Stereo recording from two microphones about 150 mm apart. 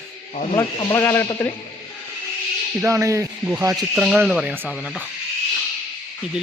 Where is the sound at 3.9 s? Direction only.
5° right (ahead or behind).